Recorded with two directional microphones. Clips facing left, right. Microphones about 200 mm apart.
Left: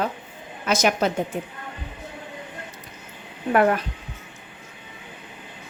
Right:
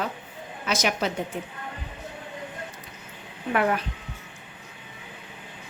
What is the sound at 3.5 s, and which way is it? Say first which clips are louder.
Speech: left 5 dB; 45° left (ahead or behind).